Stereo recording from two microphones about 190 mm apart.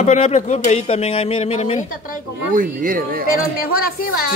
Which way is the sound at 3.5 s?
50° left (ahead or behind).